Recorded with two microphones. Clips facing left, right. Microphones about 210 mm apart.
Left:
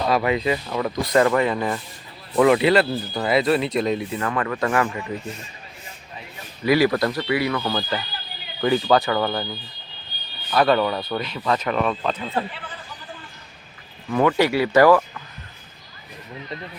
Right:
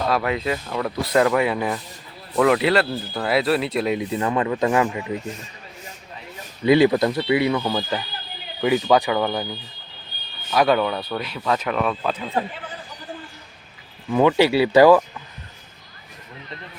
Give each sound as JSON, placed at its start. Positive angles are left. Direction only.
{"t": 0.0, "sound": "speech", "side_deg": 5}
{"t": 4.0, "sound": "speech", "side_deg": -20}
{"t": 6.7, "sound": "speech", "side_deg": -20}
{"t": 14.1, "sound": "speech", "side_deg": -10}